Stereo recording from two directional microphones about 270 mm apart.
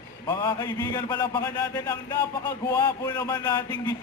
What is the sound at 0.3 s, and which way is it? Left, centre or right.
A man's voice, centre.